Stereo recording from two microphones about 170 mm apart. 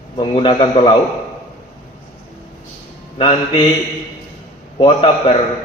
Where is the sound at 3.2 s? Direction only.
30° left (ahead or behind).